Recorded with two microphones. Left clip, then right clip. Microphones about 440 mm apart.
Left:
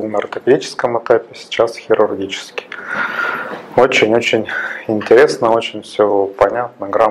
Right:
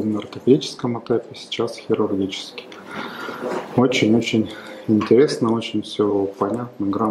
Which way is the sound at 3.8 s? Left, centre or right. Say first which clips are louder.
Left 7 dB; left.